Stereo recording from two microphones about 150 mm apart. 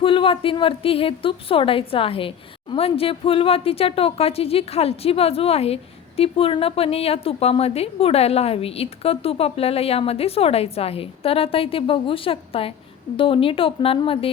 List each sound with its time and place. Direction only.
0.0 s a woman's voice: 35° left (ahead or behind)